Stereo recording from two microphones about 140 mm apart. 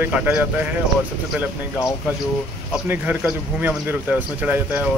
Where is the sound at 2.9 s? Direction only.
10° right (ahead or behind).